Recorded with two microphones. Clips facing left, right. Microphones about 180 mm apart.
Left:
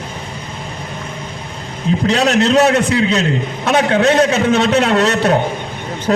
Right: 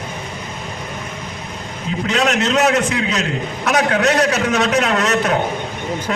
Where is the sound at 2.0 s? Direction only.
35° left (ahead or behind).